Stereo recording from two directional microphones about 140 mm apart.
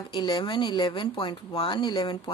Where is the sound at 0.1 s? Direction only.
35° left (ahead or behind).